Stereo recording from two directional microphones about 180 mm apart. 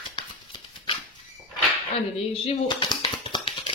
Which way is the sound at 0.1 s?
25° left (ahead or behind).